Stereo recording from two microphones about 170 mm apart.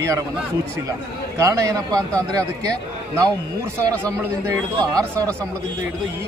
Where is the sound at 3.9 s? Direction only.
20° right (ahead or behind).